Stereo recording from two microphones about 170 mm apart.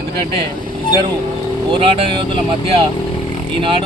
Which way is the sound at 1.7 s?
30° right (ahead or behind).